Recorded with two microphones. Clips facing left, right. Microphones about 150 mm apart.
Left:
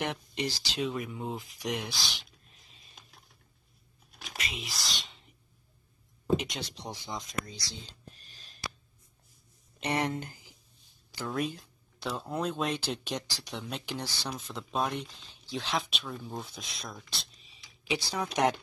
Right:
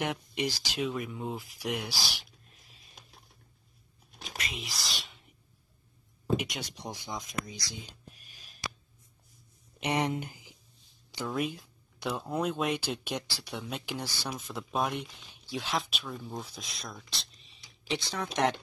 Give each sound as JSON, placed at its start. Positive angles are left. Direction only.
{"t": 0.0, "sound": "speech", "side_deg": -10}
{"t": 4.4, "sound": "speech", "side_deg": 0}
{"t": 6.3, "sound": "speech", "side_deg": -10}
{"t": 9.8, "sound": "speech", "side_deg": -15}
{"t": 11.2, "sound": "speech", "side_deg": -5}
{"t": 15.5, "sound": "speech", "side_deg": 0}